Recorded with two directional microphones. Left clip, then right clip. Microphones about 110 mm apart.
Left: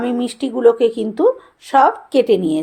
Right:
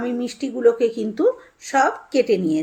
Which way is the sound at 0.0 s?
15° left (ahead or behind).